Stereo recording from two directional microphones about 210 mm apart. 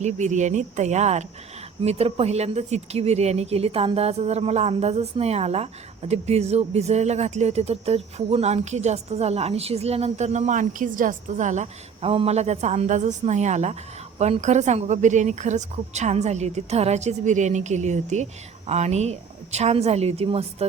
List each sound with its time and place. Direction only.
0.0 s speech: 35° right (ahead or behind)